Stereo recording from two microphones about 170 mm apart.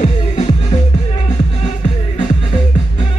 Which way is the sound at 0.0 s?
40° left (ahead or behind).